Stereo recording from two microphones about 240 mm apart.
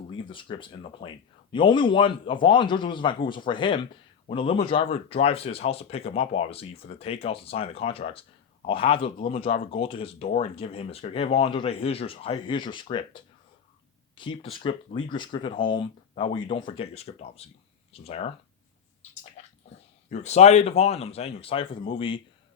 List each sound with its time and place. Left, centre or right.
0.1 s speech: left
19.4 s bathtub: left
20.1 s speech: left